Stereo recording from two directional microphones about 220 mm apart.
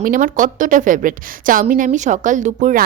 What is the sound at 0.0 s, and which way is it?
Speech, 40° right (ahead or behind).